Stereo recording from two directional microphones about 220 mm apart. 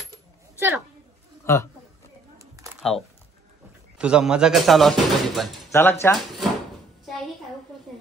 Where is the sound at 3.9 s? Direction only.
5° right (ahead or behind).